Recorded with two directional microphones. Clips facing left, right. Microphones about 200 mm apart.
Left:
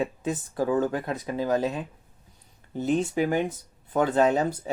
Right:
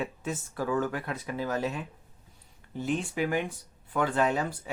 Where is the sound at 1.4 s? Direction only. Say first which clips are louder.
Left 6 dB; 35° left (ahead or behind).